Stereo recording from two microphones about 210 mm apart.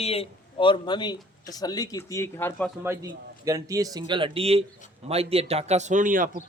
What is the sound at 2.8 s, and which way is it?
A man's voice, 15° right (ahead or behind).